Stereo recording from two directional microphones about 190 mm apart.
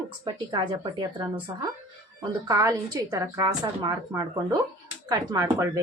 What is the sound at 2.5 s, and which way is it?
A woman's voice, 15° right (ahead or behind).